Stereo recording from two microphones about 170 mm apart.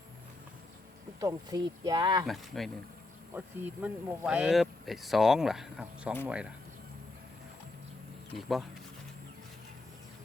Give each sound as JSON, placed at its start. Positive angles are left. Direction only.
{"t": 1.2, "sound": "speech", "side_deg": -20}
{"t": 2.2, "sound": "speech", "side_deg": 0}
{"t": 3.3, "sound": "speech", "side_deg": -10}
{"t": 8.4, "sound": "speech", "side_deg": 0}